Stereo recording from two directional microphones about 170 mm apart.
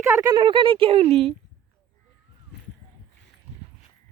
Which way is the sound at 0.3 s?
30° right (ahead or behind).